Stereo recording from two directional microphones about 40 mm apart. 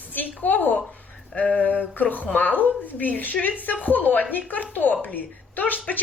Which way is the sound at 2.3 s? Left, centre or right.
Left.